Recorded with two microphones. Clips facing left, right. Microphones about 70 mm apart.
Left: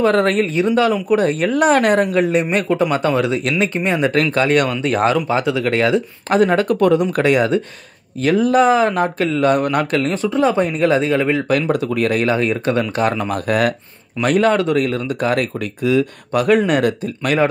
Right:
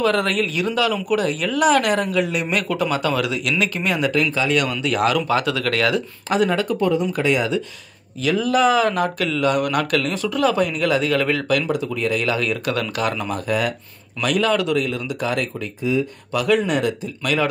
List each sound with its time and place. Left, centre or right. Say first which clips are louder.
0.0 s speech: left 5 dB; left
4.1 s speech: left 4 dB; left
6.2 s speech: left 5 dB; left
11.4 s speech: left 3 dB; left
11.9 s a man's voice: left 5 dB; left
12.2 s speech: left 5 dB; left
14.2 s speech: left 4 dB; left